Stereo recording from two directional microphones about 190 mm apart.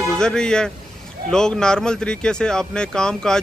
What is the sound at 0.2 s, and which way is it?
Speech, 5° left (ahead or behind).